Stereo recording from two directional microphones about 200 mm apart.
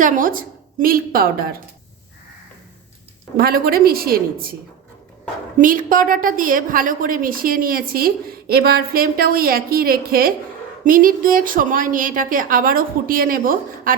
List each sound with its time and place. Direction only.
0.0 s a woman's voice: 45° right (ahead or behind)
3.3 s a woman's voice: 50° right (ahead or behind)
5.5 s a woman's voice: 45° right (ahead or behind)